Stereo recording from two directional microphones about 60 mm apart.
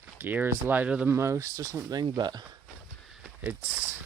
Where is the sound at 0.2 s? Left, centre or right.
Right.